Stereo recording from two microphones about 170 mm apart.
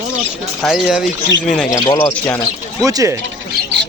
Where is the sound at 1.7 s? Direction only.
20° left (ahead or behind).